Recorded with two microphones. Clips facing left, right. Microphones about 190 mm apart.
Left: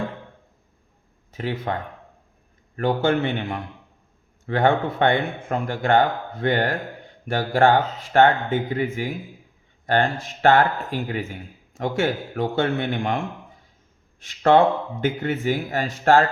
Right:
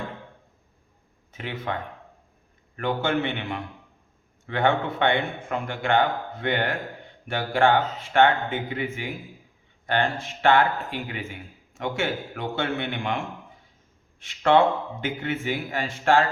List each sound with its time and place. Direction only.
1.3 s speech: 40° left (ahead or behind)
2.7 s speech: 35° left (ahead or behind)
14.2 s speech: 40° left (ahead or behind)